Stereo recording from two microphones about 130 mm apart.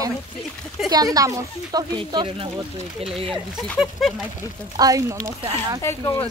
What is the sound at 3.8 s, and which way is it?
Speech, 5° right (ahead or behind).